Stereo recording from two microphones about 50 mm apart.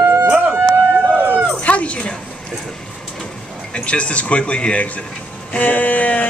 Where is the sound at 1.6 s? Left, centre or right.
Left.